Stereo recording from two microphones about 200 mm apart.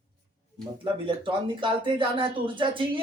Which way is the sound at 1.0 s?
25° right (ahead or behind).